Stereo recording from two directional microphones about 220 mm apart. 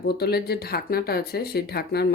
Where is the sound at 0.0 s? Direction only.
45° left (ahead or behind).